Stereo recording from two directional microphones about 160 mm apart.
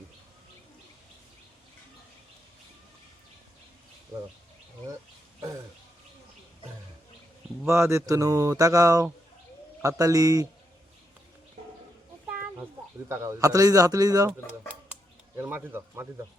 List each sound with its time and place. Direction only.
7.6 s speech: 15° right (ahead or behind)
13.1 s speech: 20° right (ahead or behind)
15.4 s speech: 15° right (ahead or behind)